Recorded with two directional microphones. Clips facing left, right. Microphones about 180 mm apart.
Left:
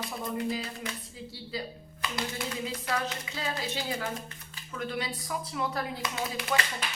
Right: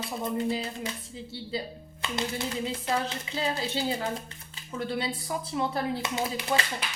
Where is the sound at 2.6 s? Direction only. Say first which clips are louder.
Right 2 dB; 25° right (ahead or behind).